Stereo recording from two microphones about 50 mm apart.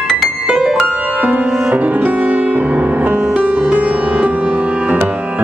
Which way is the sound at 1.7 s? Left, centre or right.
Right.